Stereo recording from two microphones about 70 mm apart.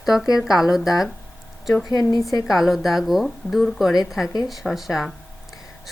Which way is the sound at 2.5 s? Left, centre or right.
Centre.